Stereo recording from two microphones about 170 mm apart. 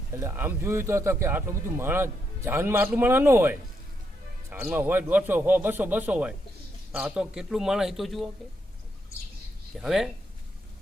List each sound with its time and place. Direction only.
0.1 s a man's voice: 15° right (ahead or behind)
9.7 s a man's voice: centre (ahead or behind)